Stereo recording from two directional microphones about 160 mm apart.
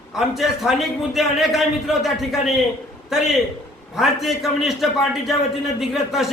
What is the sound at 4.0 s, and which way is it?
A man's voice, centre (ahead or behind).